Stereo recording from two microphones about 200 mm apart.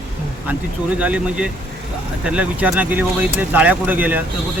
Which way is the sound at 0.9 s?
5° right (ahead or behind).